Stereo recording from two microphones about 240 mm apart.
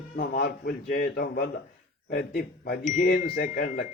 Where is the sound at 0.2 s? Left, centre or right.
Left.